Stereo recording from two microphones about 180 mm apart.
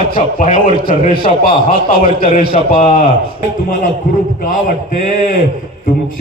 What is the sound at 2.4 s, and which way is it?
Speech, 30° right (ahead or behind).